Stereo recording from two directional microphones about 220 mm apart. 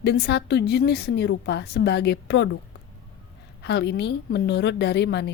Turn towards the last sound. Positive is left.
turn(degrees=50)  # may be behind; listen again after turning